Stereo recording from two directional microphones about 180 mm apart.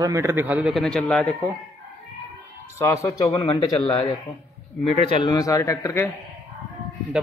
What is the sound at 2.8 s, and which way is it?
A man's voice, 15° left (ahead or behind).